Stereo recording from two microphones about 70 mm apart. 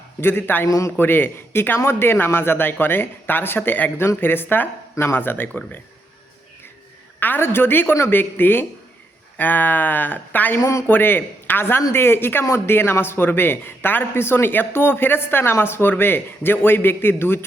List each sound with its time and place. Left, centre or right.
0.2 s a man's voice: left
0.7 s speech: left
0.9 s a man's voice: left
7.2 s a man's voice: left
10.6 s speech: left
10.8 s a man's voice: left